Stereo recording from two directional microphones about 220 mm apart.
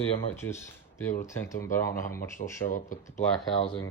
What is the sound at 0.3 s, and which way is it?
Speech, 10° left (ahead or behind).